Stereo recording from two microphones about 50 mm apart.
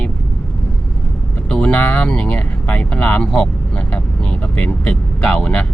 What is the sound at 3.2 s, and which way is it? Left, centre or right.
Vehicle, centre.